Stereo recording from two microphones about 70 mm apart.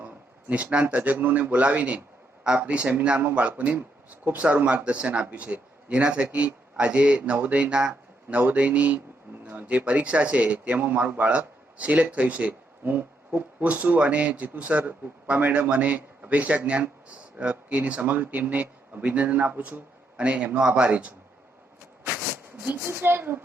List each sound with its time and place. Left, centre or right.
0.0 s a man's voice: right
22.5 s a man's voice: right